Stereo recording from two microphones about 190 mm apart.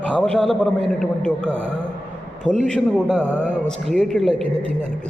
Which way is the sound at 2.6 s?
5° left (ahead or behind).